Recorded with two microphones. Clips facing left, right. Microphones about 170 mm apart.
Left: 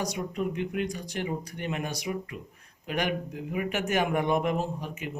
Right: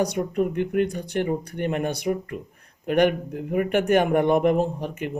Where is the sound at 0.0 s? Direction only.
55° right (ahead or behind).